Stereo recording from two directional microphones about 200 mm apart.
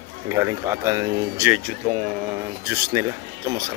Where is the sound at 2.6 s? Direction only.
10° right (ahead or behind).